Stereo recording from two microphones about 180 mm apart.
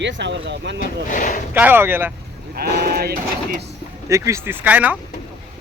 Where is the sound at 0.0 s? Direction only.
80° right.